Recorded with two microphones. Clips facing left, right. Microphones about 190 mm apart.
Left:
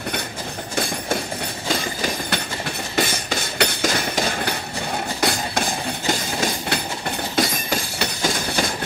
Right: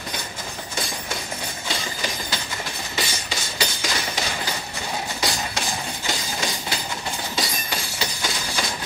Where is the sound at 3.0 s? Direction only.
55° left (ahead or behind).